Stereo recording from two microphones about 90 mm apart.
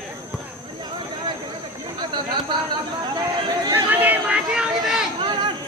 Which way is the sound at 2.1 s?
55° right (ahead or behind).